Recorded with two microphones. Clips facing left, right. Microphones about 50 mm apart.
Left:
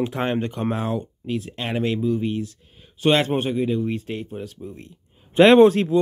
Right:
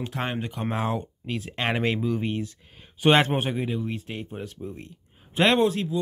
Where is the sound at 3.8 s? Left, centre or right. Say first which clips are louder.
Left 6 dB; centre.